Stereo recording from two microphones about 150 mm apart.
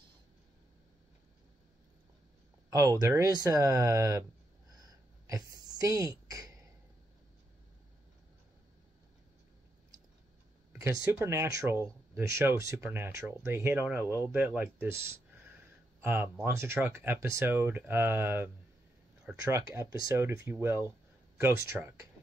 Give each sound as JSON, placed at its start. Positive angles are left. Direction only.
{"t": 2.7, "sound": "speech", "side_deg": -25}
{"t": 4.7, "sound": "a sound", "side_deg": -25}
{"t": 10.7, "sound": "speech", "side_deg": -20}